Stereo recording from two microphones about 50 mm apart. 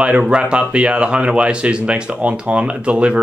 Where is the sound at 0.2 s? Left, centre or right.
Centre.